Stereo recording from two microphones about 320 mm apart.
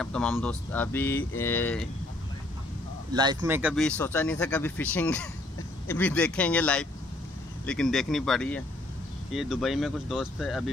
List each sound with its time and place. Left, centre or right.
0.0 s speech: centre
3.1 s speech: centre